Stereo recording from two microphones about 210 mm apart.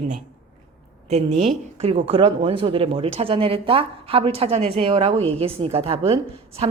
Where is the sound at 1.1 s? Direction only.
30° right (ahead or behind).